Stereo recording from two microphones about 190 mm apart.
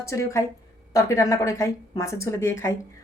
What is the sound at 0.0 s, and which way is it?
A woman's voice, 15° left (ahead or behind).